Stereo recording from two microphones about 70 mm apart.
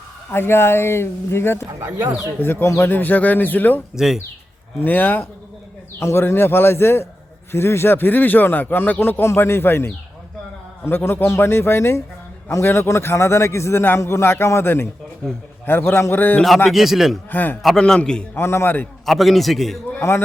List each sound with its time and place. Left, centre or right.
0.3 s speech: left
3.9 s a man's voice: centre
4.8 s speech: left
16.6 s a man's voice: centre
17.3 s speech: left
17.7 s a man's voice: centre
18.3 s speech: left
19.0 s a man's voice: centre
20.0 s speech: left